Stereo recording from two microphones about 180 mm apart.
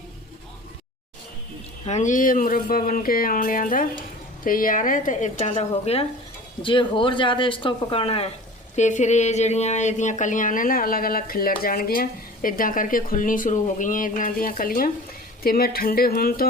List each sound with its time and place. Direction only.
1.8 s speech: 40° left (ahead or behind); by 16.5 s 55° left (ahead or behind)